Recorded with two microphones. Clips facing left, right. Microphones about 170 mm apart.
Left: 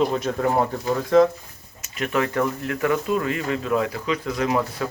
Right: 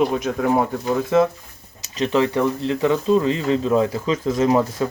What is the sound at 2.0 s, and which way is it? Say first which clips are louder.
Speech: right 4 dB; 25° right (ahead or behind).